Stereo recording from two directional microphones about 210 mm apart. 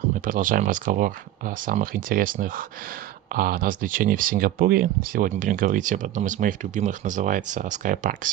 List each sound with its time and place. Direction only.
0.2 s speech: 40° right (ahead or behind)